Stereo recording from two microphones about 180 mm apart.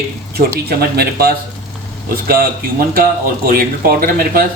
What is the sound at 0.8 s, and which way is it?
Speech, 60° right (ahead or behind).